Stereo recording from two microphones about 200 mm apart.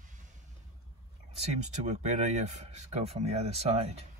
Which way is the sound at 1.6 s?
35° right (ahead or behind).